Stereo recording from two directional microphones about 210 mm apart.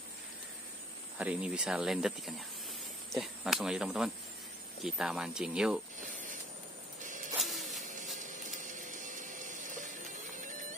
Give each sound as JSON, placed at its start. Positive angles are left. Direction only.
{"t": 1.1, "sound": "speech", "side_deg": -5}
{"t": 7.3, "sound": "a sound", "side_deg": 0}
{"t": 8.5, "sound": "printer", "side_deg": -40}